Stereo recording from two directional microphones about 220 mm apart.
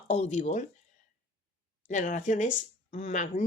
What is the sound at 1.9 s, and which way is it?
Speech, 35° left (ahead or behind).